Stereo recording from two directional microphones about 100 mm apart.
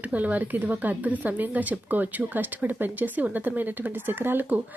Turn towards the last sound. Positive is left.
turn(degrees=-20)  # may be behind; listen again after turning